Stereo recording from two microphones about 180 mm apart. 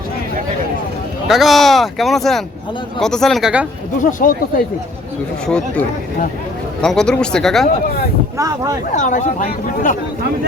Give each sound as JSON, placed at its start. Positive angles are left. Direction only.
{"t": 1.3, "sound": "speech", "side_deg": 0}
{"t": 4.0, "sound": "speech", "side_deg": 50}
{"t": 5.5, "sound": "speech", "side_deg": 5}
{"t": 6.8, "sound": "speech", "side_deg": 5}
{"t": 8.4, "sound": "speech", "side_deg": -20}
{"t": 8.9, "sound": "speech", "side_deg": 45}